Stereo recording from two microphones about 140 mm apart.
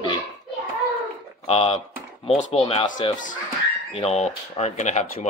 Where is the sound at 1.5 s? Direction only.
45° left (ahead or behind).